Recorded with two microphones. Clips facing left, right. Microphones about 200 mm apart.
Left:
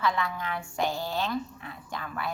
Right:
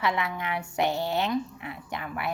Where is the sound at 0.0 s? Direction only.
20° right (ahead or behind).